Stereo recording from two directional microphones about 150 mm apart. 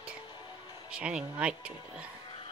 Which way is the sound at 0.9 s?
5° right (ahead or behind).